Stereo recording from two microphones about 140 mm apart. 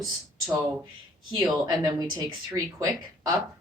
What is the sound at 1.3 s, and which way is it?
Speech, 30° right (ahead or behind).